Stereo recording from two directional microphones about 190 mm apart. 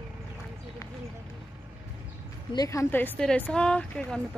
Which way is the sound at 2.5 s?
15° left (ahead or behind).